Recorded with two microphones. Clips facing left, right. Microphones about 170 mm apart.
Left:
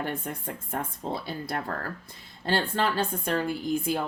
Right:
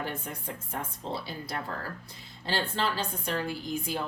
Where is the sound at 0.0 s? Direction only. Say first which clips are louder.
Left 4 dB; 50° left (ahead or behind).